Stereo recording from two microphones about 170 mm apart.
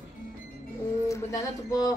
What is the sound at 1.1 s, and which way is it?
Speech, 20° left (ahead or behind).